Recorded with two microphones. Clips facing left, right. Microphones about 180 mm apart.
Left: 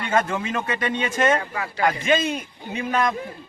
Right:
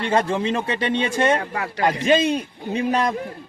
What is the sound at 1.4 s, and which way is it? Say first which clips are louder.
Speech: right 1 dB; 45° right (ahead or behind).